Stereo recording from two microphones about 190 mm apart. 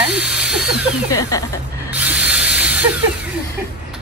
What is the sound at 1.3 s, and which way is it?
Speech, 15° left (ahead or behind).